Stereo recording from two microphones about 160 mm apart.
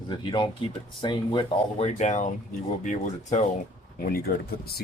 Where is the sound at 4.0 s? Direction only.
70° left (ahead or behind).